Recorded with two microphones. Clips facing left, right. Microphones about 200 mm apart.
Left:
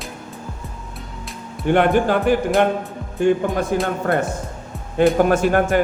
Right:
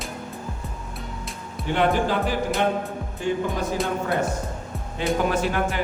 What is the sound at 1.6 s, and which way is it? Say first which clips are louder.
Speech: left 6 dB; 55° left (ahead or behind).